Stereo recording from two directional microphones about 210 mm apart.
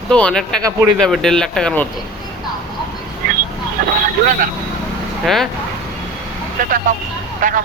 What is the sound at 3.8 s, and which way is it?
Speech, 40° right (ahead or behind).